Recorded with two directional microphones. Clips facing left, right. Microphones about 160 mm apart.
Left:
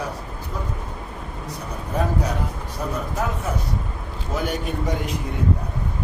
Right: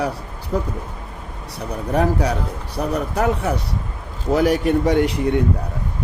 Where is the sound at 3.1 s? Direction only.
75° right (ahead or behind).